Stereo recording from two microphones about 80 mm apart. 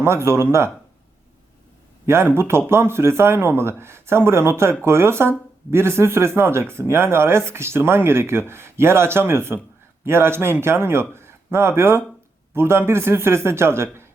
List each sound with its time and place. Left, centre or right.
0.0 s speech: right
2.0 s speech: right